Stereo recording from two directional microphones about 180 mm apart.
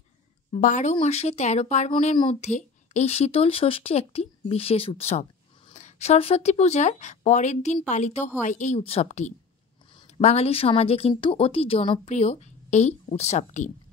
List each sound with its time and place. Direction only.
0.5 s speech: 45° left (ahead or behind)